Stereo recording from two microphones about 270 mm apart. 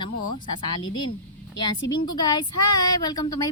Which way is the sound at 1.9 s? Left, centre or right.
Left.